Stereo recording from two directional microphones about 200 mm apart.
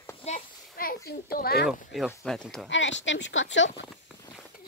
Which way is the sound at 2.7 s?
65° left (ahead or behind).